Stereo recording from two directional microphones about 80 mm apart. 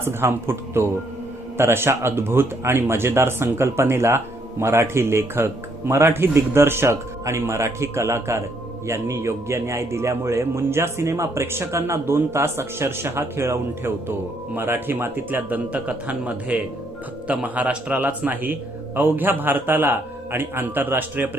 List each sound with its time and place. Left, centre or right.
0.0 s a man's voice: right